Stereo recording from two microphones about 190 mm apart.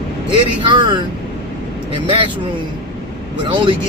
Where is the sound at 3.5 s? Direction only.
25° right (ahead or behind).